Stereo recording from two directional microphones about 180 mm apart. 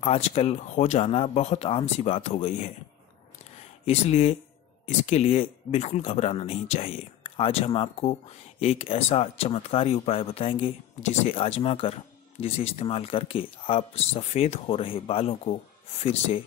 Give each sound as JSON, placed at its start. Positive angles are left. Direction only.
{"t": 0.0, "sound": "speech", "side_deg": 35}
{"t": 3.8, "sound": "speech", "side_deg": 35}